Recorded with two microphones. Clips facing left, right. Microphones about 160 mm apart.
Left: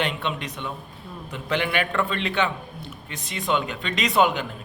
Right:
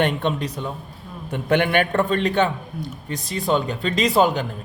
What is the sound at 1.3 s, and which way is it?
A man's voice, 55° right (ahead or behind).